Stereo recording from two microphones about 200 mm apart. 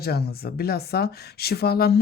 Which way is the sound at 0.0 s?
50° left (ahead or behind).